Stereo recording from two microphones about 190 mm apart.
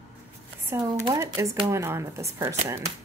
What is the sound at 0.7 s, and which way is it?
Speech, 15° right (ahead or behind).